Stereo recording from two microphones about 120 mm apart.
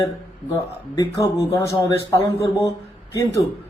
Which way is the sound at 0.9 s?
30° left (ahead or behind).